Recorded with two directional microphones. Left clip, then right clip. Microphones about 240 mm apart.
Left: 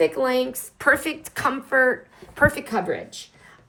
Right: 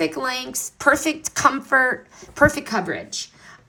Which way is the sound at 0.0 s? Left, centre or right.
Right.